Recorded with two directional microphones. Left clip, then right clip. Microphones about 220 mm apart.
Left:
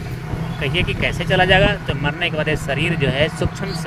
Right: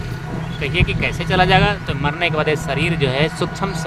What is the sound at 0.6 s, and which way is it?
Speech, 15° right (ahead or behind).